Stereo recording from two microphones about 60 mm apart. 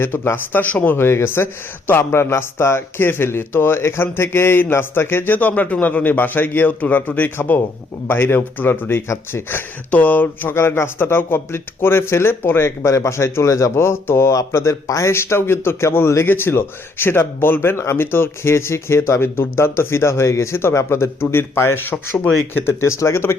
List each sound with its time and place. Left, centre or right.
0.0 s speech: left
0.9 s speech: left
13.7 s speech: left
14.5 s speech: left